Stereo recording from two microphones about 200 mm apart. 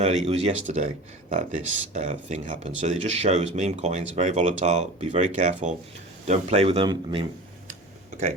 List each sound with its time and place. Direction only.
0.0 s speech: 30° right (ahead or behind)